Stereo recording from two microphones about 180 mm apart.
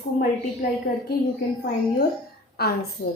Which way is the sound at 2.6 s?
60° left (ahead or behind).